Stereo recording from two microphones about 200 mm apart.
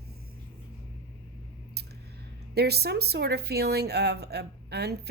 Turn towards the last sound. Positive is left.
turn(degrees=-55)  # may be behind; listen again after turning